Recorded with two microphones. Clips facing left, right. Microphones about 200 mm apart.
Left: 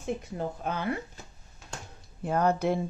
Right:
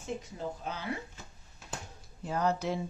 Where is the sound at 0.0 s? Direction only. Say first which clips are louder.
Left 5 dB; 60° left (ahead or behind).